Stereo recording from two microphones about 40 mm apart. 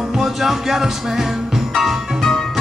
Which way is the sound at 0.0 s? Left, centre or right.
Centre.